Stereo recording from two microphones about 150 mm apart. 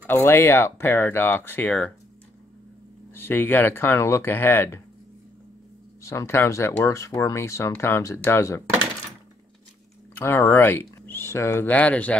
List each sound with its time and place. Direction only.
0.0 s speech: 15° left (ahead or behind)
3.2 s speech: 15° left (ahead or behind)
6.0 s speech: 20° left (ahead or behind)
10.1 s speech: 15° left (ahead or behind)